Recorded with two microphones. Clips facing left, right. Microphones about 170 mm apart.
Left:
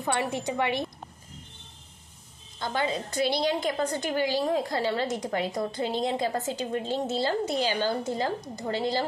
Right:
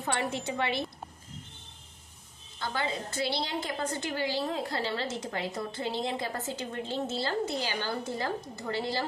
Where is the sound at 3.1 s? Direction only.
20° left (ahead or behind).